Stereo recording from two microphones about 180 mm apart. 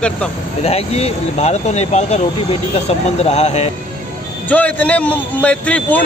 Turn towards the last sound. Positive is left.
turn(degrees=10)  # may be behind; listen again after turning